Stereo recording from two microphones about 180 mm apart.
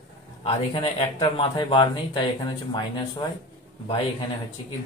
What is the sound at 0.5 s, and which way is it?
Speech, 35° left (ahead or behind).